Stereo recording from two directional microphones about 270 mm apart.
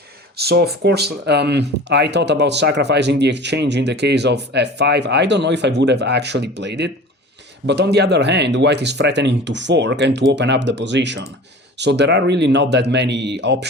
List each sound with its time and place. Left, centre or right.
0.3 s speech: right